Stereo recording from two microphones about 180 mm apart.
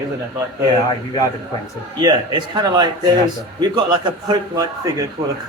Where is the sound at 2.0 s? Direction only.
25° right (ahead or behind).